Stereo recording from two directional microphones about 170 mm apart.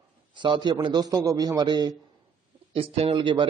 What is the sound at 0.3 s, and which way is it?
A man's voice, 30° right (ahead or behind).